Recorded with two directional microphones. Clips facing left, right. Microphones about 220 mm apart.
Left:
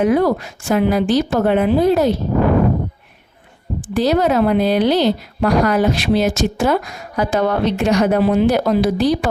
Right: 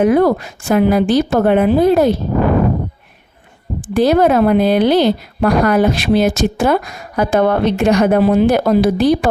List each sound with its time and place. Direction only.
0.0 s a woman's voice: 50° right (ahead or behind)
3.9 s a woman's voice: 55° right (ahead or behind)